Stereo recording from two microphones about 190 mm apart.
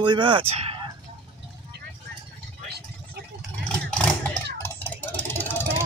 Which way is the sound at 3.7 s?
5° left (ahead or behind).